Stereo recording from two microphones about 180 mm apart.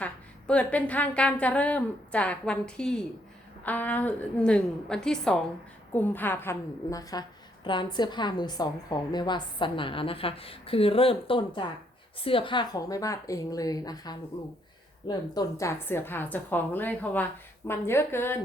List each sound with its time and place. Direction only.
0.0 s a woman's voice: 5° left (ahead or behind)